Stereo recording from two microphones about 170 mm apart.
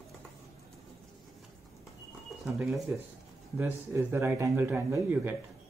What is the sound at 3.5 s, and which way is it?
A man's voice, 15° right (ahead or behind).